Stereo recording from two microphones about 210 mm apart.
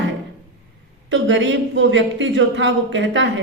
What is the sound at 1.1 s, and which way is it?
Speech, 60° right (ahead or behind).